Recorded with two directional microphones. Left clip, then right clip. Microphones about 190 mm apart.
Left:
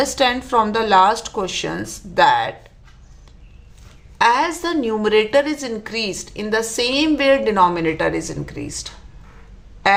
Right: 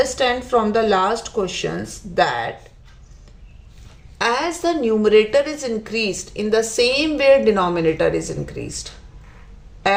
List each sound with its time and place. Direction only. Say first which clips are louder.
0.0 s speech: left 1 dB; 30° left (ahead or behind)
4.2 s a woman's voice: left 4 dB; 15° left (ahead or behind)